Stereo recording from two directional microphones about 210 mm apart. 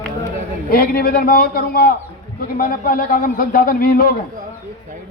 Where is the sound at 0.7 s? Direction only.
45° left (ahead or behind).